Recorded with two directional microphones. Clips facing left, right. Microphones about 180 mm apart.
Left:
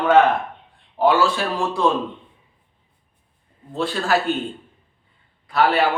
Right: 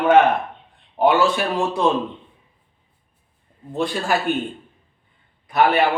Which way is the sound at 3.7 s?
15° right (ahead or behind).